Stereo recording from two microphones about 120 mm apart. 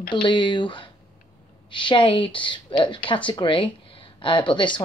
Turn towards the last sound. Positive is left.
turn(degrees=40)  # may be behind; listen again after turning